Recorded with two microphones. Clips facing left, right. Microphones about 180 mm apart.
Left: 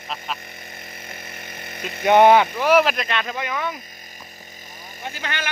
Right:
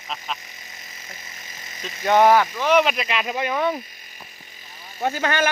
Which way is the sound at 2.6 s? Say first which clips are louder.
Left 1 dB; 5° left (ahead or behind).